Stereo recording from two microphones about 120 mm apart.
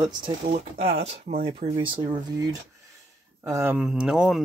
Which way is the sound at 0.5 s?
60° right (ahead or behind).